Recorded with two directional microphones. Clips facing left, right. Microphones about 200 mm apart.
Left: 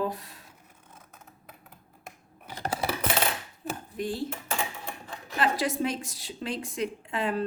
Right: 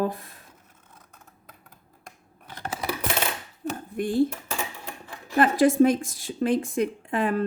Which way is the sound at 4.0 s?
50° right (ahead or behind).